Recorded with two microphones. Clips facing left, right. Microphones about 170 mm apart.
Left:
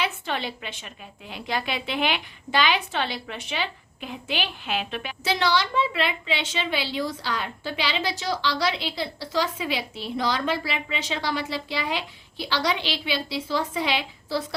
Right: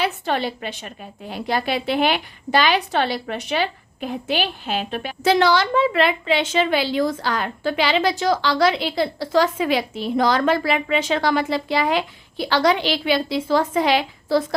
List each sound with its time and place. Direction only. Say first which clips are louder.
0.0 s a woman's voice: right 6 dB; 40° right (ahead or behind)